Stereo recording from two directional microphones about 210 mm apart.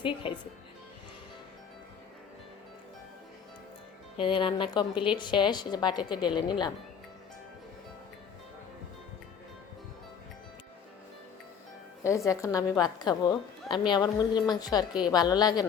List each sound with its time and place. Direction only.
0.0 s a woman's voice: 25° left (ahead or behind)
4.2 s a woman's voice: 25° left (ahead or behind)
12.0 s a woman's voice: 15° left (ahead or behind)